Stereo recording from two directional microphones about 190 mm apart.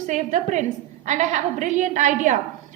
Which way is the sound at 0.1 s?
40° right (ahead or behind).